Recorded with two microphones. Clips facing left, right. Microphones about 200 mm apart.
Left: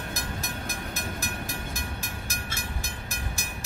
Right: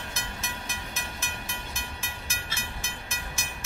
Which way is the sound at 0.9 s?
40° left (ahead or behind).